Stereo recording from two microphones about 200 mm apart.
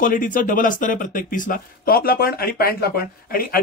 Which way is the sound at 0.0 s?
45° left (ahead or behind).